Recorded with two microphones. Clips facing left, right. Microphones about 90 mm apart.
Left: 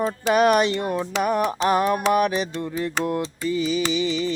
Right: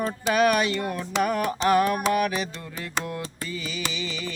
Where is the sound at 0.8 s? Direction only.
20° left (ahead or behind).